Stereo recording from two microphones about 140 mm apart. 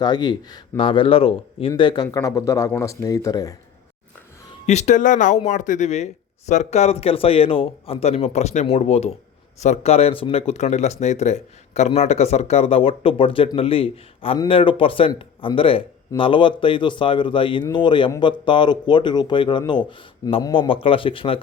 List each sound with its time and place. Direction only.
0.0 s a man's voice: 30° left (ahead or behind)
2.0 s speech: 25° left (ahead or behind)
4.6 s a man's voice: 55° left (ahead or behind)